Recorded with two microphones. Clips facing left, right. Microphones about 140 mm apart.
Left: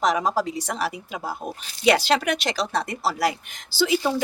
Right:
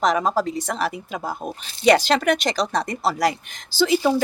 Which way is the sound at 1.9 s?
5° left (ahead or behind).